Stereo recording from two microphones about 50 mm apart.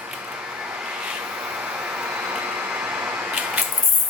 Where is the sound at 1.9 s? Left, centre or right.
Right.